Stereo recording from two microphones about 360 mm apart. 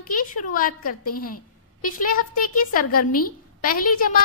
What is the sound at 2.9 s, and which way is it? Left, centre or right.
Speech, left.